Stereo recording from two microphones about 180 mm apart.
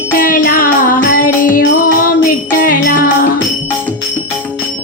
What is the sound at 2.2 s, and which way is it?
Jingle bell, 50° left (ahead or behind).